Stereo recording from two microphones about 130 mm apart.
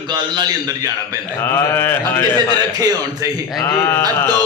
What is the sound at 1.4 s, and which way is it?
Speech, 20° left (ahead or behind).